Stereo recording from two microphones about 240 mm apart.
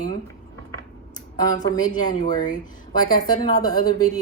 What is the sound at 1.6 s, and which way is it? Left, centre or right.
Speech, centre.